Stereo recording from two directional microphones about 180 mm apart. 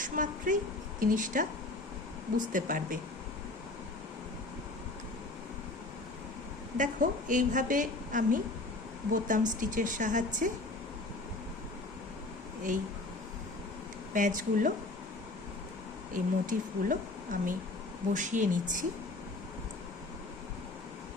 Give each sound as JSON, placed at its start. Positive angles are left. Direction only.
{"t": 0.0, "sound": "a woman's voice", "side_deg": -45}
{"t": 6.7, "sound": "a woman's voice", "side_deg": -45}
{"t": 14.1, "sound": "a woman's voice", "side_deg": -45}
{"t": 16.1, "sound": "a woman's voice", "side_deg": -45}